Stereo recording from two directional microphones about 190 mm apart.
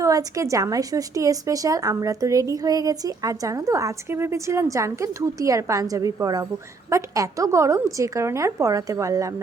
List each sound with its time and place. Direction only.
0.0 s a woman's voice: 15° right (ahead or behind)